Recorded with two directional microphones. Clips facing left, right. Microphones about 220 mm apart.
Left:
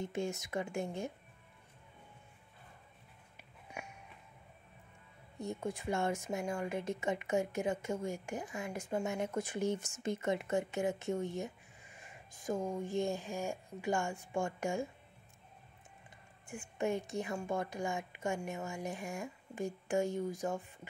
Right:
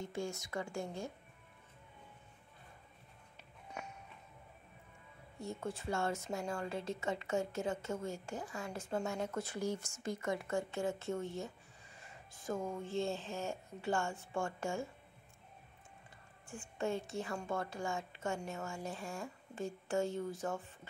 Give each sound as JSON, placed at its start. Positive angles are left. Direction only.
{"t": 0.0, "sound": "a woman's voice", "side_deg": 20}
{"t": 3.8, "sound": "a sound", "side_deg": 10}
{"t": 5.4, "sound": "a woman's voice", "side_deg": 15}
{"t": 16.4, "sound": "a woman's voice", "side_deg": 15}